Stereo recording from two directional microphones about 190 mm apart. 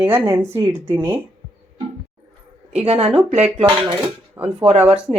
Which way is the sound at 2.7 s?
35° right (ahead or behind).